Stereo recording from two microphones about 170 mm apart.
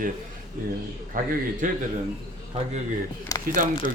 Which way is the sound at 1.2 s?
55° right (ahead or behind).